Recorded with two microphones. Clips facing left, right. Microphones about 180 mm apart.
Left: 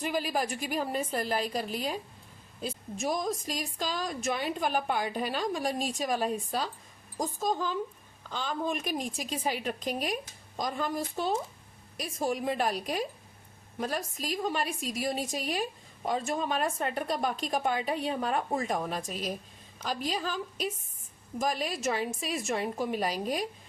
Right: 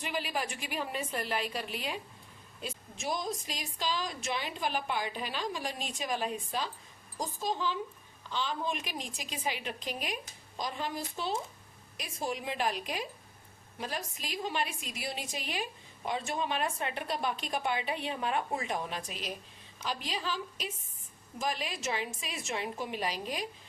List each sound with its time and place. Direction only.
0.0 s a woman's voice: 45° left (ahead or behind)